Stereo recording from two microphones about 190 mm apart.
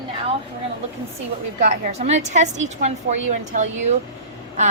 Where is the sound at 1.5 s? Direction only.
35° right (ahead or behind).